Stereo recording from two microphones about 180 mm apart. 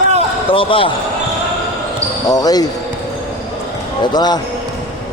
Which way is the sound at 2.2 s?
20° left (ahead or behind).